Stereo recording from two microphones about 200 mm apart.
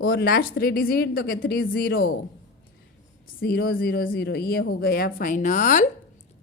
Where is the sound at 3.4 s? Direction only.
50° left (ahead or behind).